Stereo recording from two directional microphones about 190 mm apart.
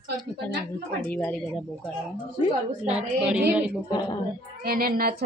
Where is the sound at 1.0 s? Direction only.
5° left (ahead or behind).